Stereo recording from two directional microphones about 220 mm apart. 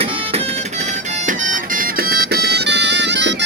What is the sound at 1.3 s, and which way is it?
Music, 35° right (ahead or behind).